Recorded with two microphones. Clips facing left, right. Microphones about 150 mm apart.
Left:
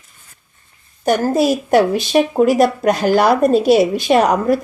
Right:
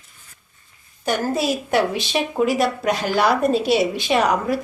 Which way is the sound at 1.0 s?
45° left (ahead or behind).